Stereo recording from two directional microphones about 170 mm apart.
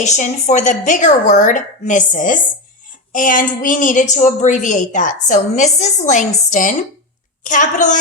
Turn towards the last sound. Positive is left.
turn(degrees=50)  # may be behind; listen again after turning